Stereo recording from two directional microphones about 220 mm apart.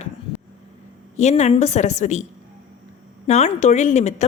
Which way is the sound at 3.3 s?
30° left (ahead or behind).